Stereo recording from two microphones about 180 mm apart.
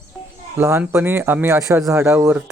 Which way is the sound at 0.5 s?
10° right (ahead or behind).